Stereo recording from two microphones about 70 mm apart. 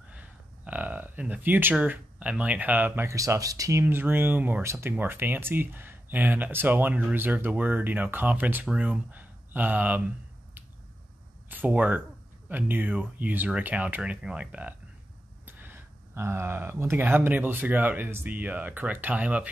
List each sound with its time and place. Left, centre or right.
0.1 s speech: right
3.1 s speech: right
3.8 s speech: right
11.4 s speech: right
15.4 s a sound: right
17.0 s speech: right